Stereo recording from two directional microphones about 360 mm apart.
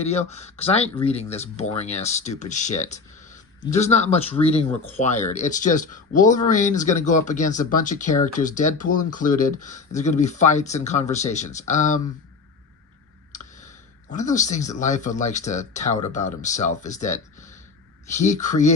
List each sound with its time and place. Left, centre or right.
0.0 s speech: centre
14.1 s speech: centre